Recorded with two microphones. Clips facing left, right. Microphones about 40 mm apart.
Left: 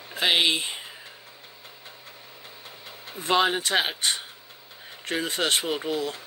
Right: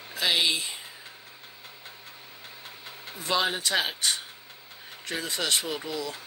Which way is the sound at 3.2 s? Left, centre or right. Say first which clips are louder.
Left 4 dB; left.